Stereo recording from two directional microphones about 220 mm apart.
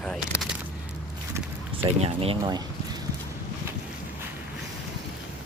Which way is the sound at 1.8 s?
30° right (ahead or behind).